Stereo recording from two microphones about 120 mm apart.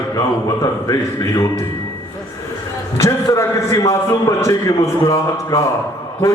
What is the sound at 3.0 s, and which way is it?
A man's voice, 25° left (ahead or behind).